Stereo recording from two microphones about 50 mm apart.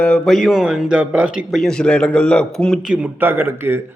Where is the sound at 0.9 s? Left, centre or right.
Right.